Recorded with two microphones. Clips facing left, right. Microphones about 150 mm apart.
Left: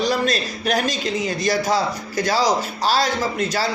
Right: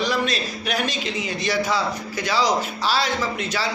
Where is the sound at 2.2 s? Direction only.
40° left (ahead or behind).